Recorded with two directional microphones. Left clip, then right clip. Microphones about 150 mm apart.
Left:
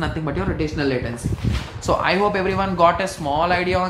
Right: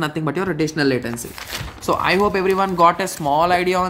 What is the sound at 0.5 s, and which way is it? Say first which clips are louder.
Speech: right 4 dB; 60° right (ahead or behind).